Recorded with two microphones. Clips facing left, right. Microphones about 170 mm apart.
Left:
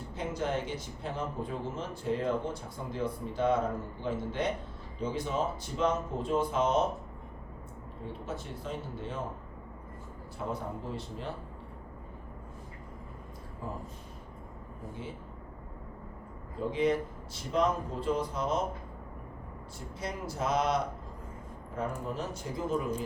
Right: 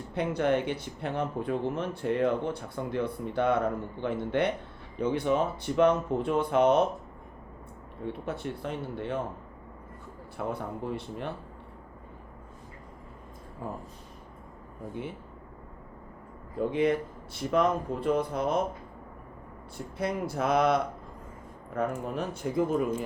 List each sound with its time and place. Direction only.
0.1 s speech: 65° right (ahead or behind)
8.0 s speech: 60° right (ahead or behind)
10.3 s speech: 60° right (ahead or behind)
16.6 s speech: 60° right (ahead or behind)
19.7 s speech: 60° right (ahead or behind)